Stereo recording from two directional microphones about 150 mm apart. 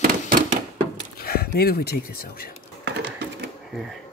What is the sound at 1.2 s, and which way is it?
Speech, 90° left.